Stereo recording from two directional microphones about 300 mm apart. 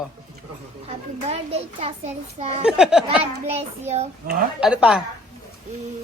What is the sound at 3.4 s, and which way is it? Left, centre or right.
A child's voice, right.